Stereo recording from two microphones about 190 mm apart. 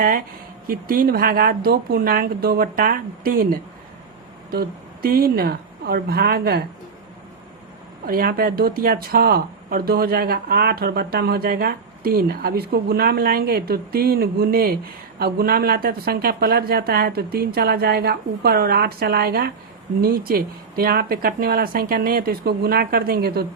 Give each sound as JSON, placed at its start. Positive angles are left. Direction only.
{"t": 0.7, "sound": "speech", "side_deg": -50}
{"t": 5.0, "sound": "speech", "side_deg": -50}
{"t": 8.0, "sound": "speech", "side_deg": -50}